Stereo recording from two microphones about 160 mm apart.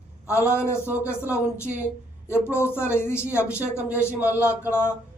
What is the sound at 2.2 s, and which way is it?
Speech, 15° left (ahead or behind).